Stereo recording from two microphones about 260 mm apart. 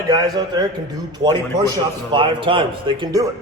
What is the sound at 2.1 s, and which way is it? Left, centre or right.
Speech, centre.